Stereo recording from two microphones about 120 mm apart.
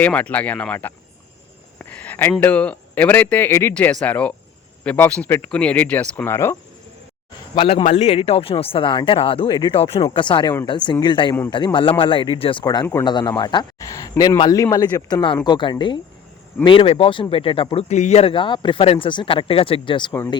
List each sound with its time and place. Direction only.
0.0 s speech: 10° left (ahead or behind)
1.8 s a sound: 10° left (ahead or behind)
2.4 s speech: 10° left (ahead or behind)
7.5 s speech: 45° left (ahead or behind)
7.9 s speech: 65° left (ahead or behind); by 12.6 s 45° left (ahead or behind)
12.6 s speech: 30° left (ahead or behind)
13.1 s speech: 40° left (ahead or behind)
17.7 s a man's voice: 75° left (ahead or behind)
18.2 s speech: 50° left (ahead or behind)